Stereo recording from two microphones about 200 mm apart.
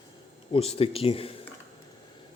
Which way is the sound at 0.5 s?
30° left (ahead or behind).